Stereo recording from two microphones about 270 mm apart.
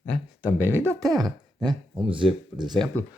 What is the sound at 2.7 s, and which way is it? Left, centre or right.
Speech, centre.